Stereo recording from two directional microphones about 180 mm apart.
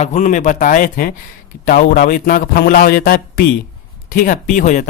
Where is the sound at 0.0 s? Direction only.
40° left (ahead or behind).